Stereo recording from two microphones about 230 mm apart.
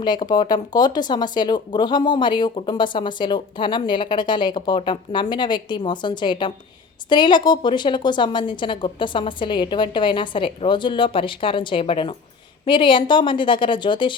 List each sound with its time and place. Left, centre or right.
0.0 s speech: centre